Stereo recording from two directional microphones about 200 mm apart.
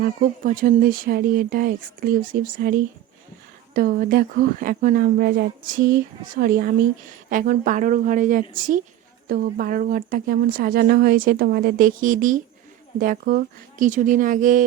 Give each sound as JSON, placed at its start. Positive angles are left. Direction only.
{"t": 0.2, "sound": "speech", "side_deg": -45}